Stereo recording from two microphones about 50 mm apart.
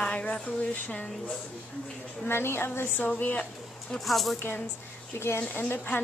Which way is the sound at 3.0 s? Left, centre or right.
Left.